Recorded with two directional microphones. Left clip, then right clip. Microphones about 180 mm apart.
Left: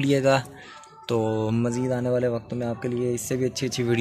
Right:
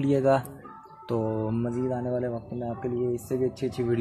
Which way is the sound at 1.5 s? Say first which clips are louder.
Left 3 dB; 30° left (ahead or behind).